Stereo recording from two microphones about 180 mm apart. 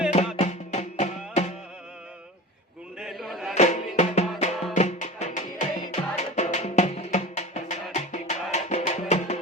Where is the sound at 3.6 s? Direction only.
40° left (ahead or behind).